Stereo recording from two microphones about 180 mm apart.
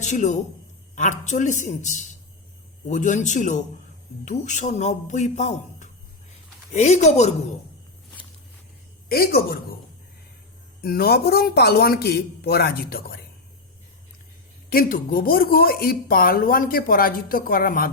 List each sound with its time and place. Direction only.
0.0 s a man's voice: 40° left (ahead or behind)
9.0 s speech: 55° left (ahead or behind)
10.8 s speech: 55° left (ahead or behind)
14.7 s speech: 55° left (ahead or behind)